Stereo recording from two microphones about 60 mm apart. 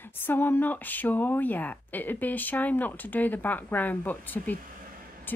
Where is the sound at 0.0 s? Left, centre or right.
Left.